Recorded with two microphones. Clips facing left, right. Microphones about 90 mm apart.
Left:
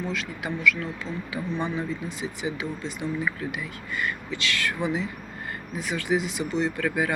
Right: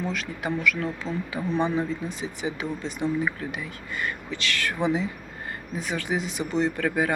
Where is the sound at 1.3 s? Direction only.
25° right (ahead or behind).